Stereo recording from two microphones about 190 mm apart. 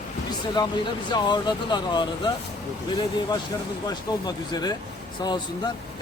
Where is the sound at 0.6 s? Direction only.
20° left (ahead or behind).